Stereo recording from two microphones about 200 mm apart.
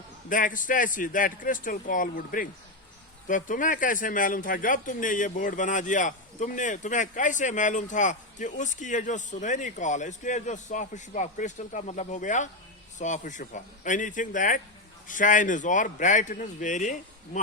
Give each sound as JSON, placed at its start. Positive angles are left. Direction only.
{"t": 0.3, "sound": "speech", "side_deg": 40}